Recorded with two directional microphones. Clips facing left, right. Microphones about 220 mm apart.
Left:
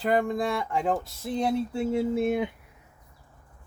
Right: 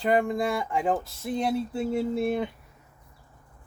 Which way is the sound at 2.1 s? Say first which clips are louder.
Left 1 dB; 15° left (ahead or behind).